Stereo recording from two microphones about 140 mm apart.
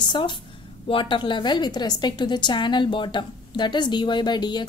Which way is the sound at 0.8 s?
35° left (ahead or behind).